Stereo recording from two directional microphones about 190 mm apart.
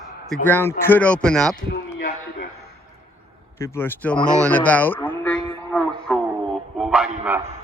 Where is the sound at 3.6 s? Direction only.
10° left (ahead or behind).